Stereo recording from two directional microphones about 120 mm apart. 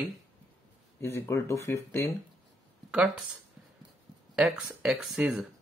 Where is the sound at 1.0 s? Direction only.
20° left (ahead or behind).